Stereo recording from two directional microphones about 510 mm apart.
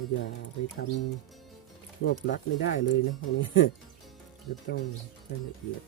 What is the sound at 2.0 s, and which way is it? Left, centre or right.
Speech, left.